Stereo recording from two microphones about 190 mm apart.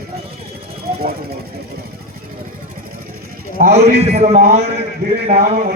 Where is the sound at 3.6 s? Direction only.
60° right (ahead or behind).